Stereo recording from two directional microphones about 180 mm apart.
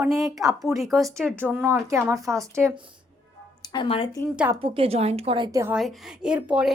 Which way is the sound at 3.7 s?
30° left (ahead or behind).